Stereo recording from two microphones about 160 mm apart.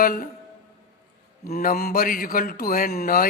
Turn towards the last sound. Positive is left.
turn(degrees=65)  # may be behind; listen again after turning